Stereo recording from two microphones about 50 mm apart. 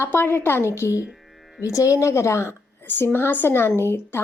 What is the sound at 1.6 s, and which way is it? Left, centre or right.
Speech, left.